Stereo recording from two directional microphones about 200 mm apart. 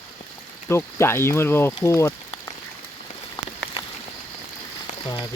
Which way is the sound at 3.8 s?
25° left (ahead or behind).